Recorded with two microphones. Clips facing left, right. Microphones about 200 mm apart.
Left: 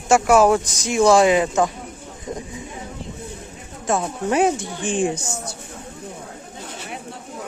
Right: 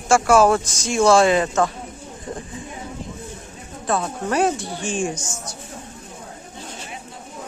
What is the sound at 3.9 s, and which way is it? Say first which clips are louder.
Speech: left 2 dB; 15° left (ahead or behind).